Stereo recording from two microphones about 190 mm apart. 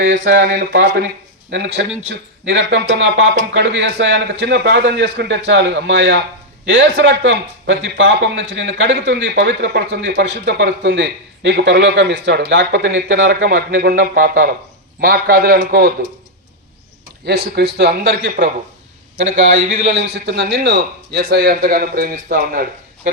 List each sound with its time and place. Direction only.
0.0 s a man's voice: 70° right (ahead or behind)
13.4 s a man's voice: 45° right (ahead or behind)
17.2 s a man's voice: 60° right (ahead or behind)
19.1 s a man's voice: 40° right (ahead or behind)
20.1 s a man's voice: 60° right (ahead or behind)